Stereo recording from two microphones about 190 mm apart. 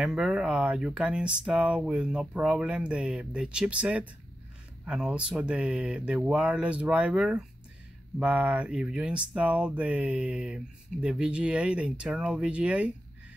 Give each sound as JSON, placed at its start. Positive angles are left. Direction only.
{"t": 0.0, "sound": "speech", "side_deg": -5}